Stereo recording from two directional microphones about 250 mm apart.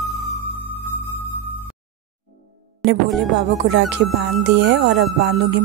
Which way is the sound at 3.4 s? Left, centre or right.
Right.